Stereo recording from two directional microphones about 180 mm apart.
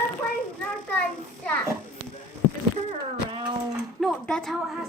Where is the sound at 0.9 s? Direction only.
10° left (ahead or behind).